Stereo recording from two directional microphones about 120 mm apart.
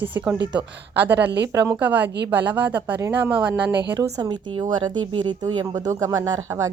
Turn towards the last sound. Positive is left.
turn(degrees=-25)  # may be behind; listen again after turning